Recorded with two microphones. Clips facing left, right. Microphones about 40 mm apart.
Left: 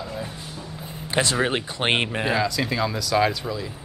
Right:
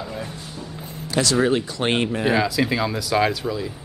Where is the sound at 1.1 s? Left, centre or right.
Left.